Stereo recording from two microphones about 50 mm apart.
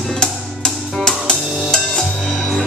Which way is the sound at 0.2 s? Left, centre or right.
Centre.